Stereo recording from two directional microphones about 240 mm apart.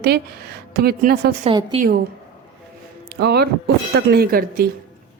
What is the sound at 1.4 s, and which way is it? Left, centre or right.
Speech, right.